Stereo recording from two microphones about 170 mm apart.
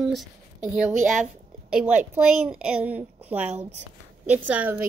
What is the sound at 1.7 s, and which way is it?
A woman's voice, 5° right (ahead or behind).